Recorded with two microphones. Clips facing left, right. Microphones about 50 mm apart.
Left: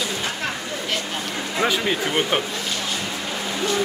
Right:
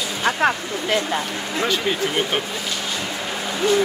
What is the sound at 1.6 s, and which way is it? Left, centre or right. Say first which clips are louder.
Speech: even; centre.